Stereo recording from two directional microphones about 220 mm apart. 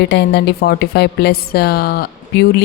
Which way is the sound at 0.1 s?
50° left (ahead or behind).